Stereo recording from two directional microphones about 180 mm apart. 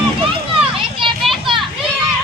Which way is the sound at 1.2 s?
Centre (ahead or behind).